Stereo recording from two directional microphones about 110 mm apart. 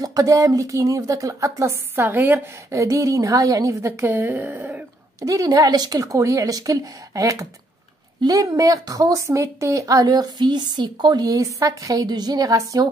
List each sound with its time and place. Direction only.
0.0 s speech: 30° right (ahead or behind); by 4.8 s 15° right (ahead or behind)
5.2 s a woman's voice: 35° right (ahead or behind)